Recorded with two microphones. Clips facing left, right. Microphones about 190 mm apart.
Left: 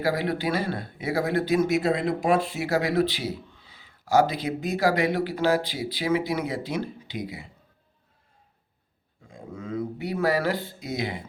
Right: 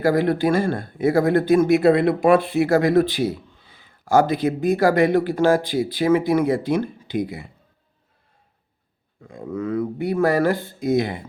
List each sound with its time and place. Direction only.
0.0 s speech: 50° right (ahead or behind)
9.2 s speech: 60° right (ahead or behind)